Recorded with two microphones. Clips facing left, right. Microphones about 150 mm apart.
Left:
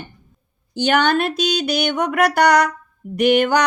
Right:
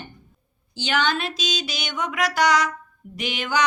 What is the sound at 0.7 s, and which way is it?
Music, 60° left (ahead or behind).